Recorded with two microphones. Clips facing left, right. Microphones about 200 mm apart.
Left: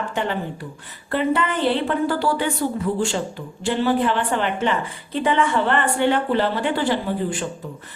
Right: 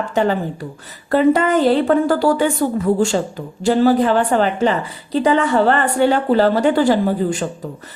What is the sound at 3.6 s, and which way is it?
Speech, 40° right (ahead or behind).